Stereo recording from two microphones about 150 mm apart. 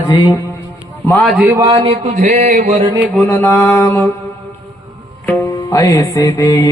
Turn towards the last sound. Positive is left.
turn(degrees=25)  # may be behind; listen again after turning